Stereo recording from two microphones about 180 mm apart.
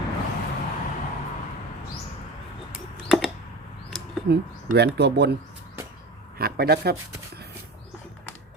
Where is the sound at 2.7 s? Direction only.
Centre (ahead or behind).